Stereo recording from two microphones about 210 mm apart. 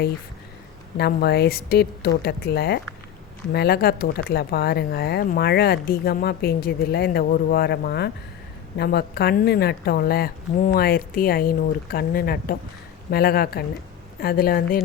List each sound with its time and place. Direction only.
0.9 s speech: 50° left (ahead or behind)